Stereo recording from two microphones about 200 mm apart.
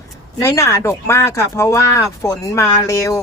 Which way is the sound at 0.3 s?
15° left (ahead or behind).